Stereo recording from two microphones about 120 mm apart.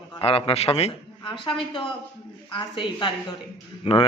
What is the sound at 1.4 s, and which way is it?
A woman's voice, 45° left (ahead or behind).